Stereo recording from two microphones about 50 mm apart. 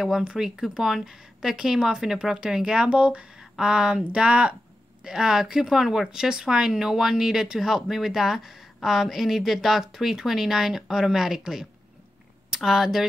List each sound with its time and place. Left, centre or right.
0.2 s speech: centre